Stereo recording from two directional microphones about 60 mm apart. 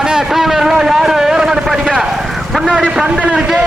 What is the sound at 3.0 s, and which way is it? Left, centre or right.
Speech, centre.